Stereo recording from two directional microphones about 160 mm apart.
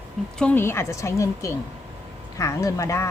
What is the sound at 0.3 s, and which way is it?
Speech, 10° left (ahead or behind).